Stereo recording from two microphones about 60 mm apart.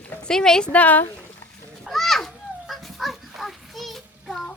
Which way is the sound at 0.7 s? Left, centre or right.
Left.